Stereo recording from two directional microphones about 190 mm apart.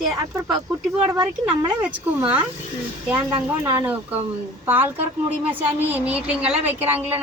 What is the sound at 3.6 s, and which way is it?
Speech, 10° right (ahead or behind).